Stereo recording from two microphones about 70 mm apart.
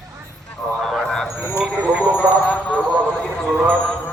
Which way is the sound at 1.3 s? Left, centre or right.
Left.